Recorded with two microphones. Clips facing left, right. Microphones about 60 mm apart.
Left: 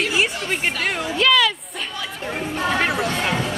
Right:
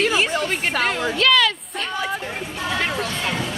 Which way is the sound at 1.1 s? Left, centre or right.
Centre.